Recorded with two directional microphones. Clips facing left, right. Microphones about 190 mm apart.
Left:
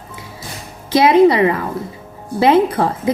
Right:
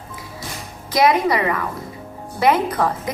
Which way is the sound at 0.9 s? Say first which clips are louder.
Left 6 dB; 30° left (ahead or behind).